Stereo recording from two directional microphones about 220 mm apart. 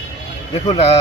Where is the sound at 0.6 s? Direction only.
25° left (ahead or behind).